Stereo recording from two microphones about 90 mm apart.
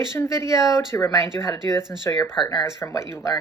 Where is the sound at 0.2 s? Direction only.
35° left (ahead or behind).